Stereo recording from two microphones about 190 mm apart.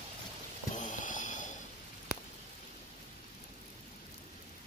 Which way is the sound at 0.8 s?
45° left (ahead or behind).